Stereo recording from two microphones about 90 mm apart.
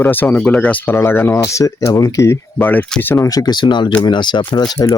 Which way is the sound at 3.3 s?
45° left (ahead or behind).